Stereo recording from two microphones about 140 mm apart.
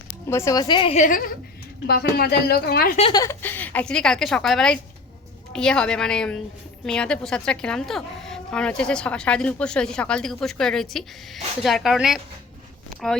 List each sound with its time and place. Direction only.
0.3 s speech: 20° left (ahead or behind); by 0.9 s 35° left (ahead or behind)
0.9 s a woman's voice: 70° left (ahead or behind)
1.9 s speech: 90° left
3.1 s speech: 25° left (ahead or behind)
3.4 s a woman's voice: 15° left (ahead or behind); by 12.2 s 5° right (ahead or behind)